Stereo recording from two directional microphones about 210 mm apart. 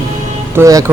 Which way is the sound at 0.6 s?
15° right (ahead or behind).